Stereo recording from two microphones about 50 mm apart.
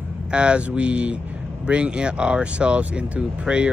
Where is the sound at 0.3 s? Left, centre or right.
Centre.